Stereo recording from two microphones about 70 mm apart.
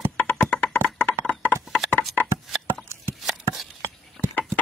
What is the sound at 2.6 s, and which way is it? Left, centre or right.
Chopping, right.